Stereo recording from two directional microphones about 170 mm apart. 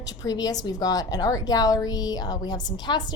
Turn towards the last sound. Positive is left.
turn(degrees=25)  # may be behind; listen again after turning